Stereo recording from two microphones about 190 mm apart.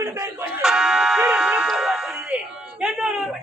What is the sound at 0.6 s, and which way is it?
Music, 5° right (ahead or behind).